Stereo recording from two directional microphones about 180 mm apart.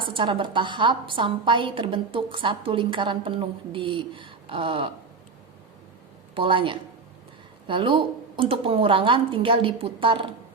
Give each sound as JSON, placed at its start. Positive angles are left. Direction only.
{"t": 0.0, "sound": "a woman's voice", "side_deg": -30}
{"t": 6.3, "sound": "a woman's voice", "side_deg": -30}